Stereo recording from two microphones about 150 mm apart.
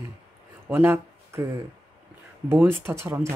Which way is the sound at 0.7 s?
15° right (ahead or behind).